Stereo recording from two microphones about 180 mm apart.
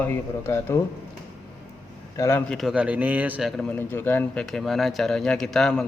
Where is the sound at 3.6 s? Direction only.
10° left (ahead or behind).